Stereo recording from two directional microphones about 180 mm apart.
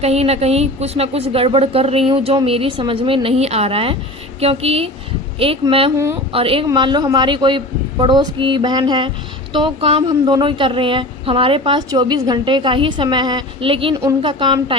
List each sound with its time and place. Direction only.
0.0 s a woman's voice: 35° right (ahead or behind)